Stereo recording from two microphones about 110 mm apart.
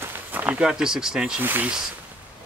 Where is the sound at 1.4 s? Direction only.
15° right (ahead or behind).